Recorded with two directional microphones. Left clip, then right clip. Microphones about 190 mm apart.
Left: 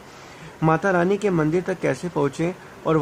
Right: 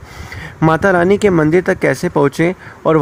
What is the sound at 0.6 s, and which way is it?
Speech, 45° right (ahead or behind).